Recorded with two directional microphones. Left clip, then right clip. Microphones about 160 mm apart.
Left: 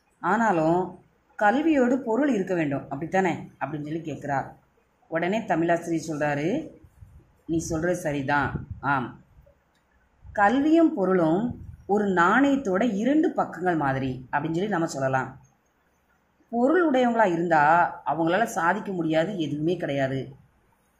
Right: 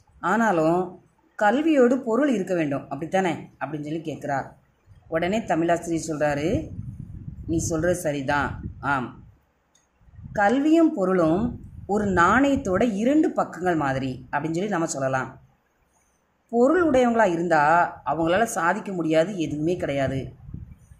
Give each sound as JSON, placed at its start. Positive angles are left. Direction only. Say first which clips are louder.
{"t": 0.2, "sound": "speech", "louder": "right 1 dB", "side_deg": -25}
{"t": 10.3, "sound": "speech", "louder": "right 1 dB", "side_deg": -25}
{"t": 16.4, "sound": "speech", "louder": "right 2 dB", "side_deg": -30}